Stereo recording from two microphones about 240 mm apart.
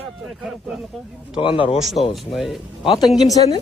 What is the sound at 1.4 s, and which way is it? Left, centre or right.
Speech, left.